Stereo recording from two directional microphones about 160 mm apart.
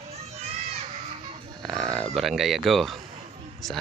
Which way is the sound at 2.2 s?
Centre (ahead or behind).